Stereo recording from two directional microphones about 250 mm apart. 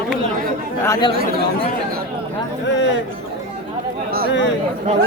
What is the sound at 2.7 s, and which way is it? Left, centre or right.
Speech, left.